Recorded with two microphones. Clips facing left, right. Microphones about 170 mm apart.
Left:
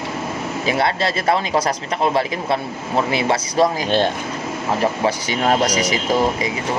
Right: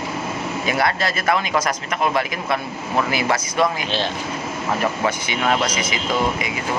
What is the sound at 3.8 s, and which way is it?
Speech, 50° left (ahead or behind).